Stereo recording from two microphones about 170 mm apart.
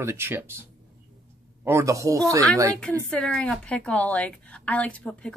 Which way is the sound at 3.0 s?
5° left (ahead or behind).